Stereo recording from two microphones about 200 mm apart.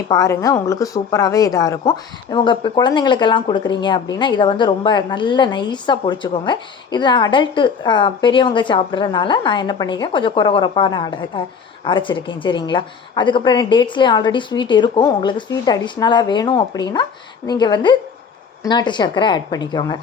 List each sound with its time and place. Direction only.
0.1 s speech: 15° left (ahead or behind)